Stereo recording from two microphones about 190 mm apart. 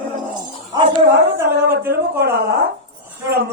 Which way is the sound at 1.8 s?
10° right (ahead or behind).